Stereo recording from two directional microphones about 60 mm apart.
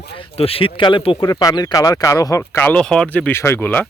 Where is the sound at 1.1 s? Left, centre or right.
Left.